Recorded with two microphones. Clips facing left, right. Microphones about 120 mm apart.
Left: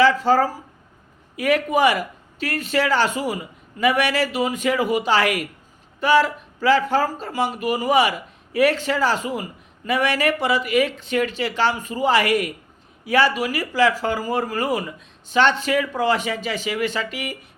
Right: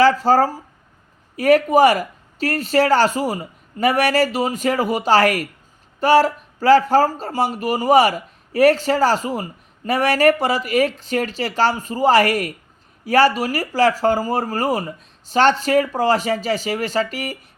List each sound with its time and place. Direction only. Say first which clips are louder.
0.0 s speech: right 2 dB; 40° right (ahead or behind)